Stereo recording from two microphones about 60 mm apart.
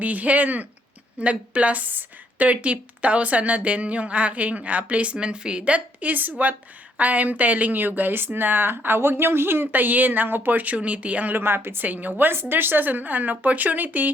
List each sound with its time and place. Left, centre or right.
0.0 s a woman's voice: right
11.3 s a woman's voice: right